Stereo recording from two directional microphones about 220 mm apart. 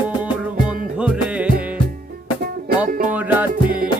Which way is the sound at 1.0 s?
5° right (ahead or behind).